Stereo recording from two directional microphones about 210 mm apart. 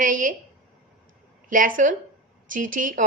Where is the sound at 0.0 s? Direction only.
40° right (ahead or behind).